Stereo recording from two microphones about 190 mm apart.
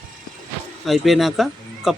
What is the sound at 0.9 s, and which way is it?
Speech, centre (ahead or behind).